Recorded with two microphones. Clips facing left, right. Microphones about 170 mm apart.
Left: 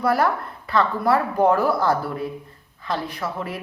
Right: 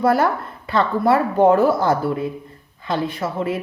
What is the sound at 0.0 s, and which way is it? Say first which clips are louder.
A woman's voice: right 3 dB; 25° right (ahead or behind).